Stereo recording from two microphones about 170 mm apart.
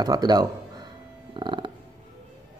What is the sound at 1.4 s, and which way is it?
Music, 30° right (ahead or behind).